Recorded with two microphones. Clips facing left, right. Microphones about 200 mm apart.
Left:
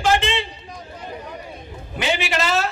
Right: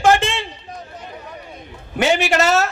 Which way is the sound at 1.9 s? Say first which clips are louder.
Right 6 dB; 45° right (ahead or behind).